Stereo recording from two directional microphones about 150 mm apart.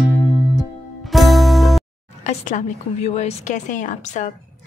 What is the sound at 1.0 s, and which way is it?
Music, centre (ahead or behind).